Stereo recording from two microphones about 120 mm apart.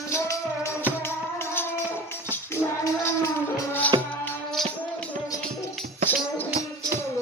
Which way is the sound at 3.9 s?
30° right (ahead or behind).